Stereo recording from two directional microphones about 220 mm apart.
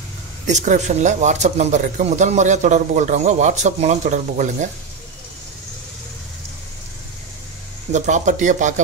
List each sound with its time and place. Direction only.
0.5 s speech: 30° right (ahead or behind)
7.9 s speech: 35° right (ahead or behind)